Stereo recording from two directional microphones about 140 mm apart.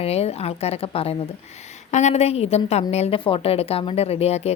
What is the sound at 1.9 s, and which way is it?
A woman's voice, 55° left (ahead or behind).